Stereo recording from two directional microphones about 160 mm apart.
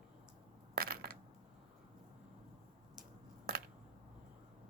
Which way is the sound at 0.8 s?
70° right (ahead or behind).